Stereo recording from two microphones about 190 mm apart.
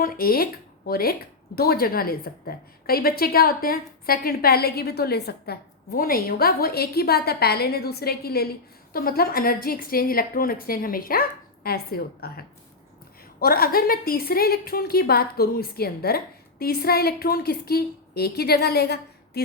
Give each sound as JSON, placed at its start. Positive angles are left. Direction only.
{"t": 0.0, "sound": "a woman's voice", "side_deg": 50}